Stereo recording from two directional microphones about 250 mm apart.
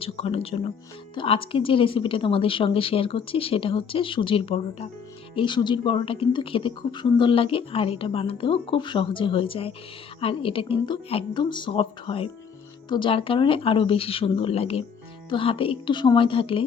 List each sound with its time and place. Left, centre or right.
0.0 s speech: left